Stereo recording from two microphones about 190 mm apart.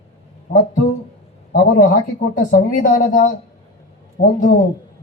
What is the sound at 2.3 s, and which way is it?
Speech, 45° left (ahead or behind).